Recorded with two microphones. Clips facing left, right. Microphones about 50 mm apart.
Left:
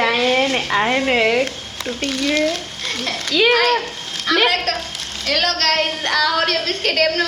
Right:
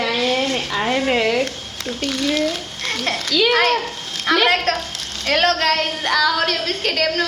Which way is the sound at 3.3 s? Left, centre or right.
Left.